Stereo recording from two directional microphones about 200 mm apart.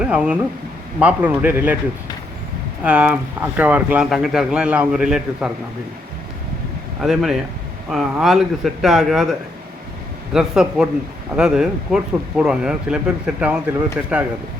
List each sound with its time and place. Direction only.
0.0 s a man's voice: 5° right (ahead or behind)
2.8 s speech: 5° right (ahead or behind)
7.0 s speech: centre (ahead or behind)
10.3 s speech: 5° right (ahead or behind)